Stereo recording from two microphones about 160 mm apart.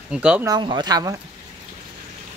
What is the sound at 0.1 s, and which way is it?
Speech, 5° right (ahead or behind).